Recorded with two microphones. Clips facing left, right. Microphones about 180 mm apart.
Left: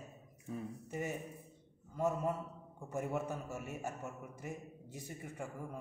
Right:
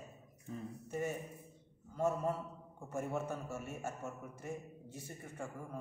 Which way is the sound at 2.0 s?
15° left (ahead or behind).